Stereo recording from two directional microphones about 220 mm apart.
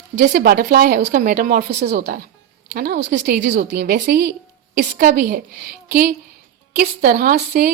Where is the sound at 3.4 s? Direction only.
35° right (ahead or behind).